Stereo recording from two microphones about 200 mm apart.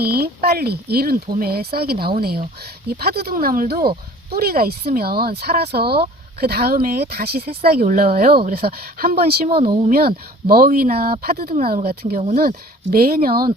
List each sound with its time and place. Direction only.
0.0 s speech: 50° right (ahead or behind)
9.5 s speech: 30° right (ahead or behind)
10.5 s speech: 45° right (ahead or behind)